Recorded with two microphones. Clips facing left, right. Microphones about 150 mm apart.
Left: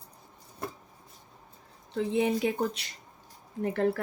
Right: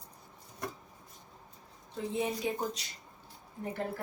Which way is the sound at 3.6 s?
85° left.